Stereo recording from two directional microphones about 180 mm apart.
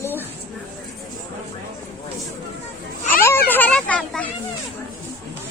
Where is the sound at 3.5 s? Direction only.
10° left (ahead or behind).